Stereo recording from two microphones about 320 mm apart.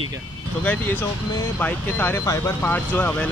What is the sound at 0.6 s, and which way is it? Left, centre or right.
Speech, centre.